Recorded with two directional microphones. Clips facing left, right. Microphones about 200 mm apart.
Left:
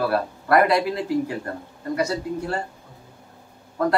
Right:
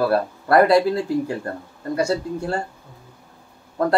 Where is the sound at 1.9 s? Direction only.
30° right (ahead or behind).